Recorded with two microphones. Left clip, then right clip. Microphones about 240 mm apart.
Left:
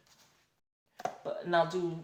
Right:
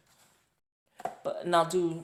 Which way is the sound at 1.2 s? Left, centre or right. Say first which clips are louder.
Right 3 dB; right.